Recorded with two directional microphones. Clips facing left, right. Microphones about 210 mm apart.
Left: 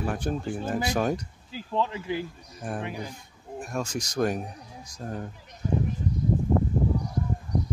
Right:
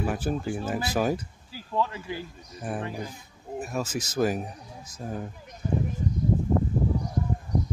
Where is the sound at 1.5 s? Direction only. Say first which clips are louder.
Left 1 dB; 20° left (ahead or behind).